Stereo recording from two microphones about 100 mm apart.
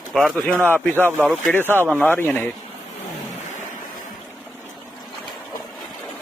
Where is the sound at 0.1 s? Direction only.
Centre (ahead or behind).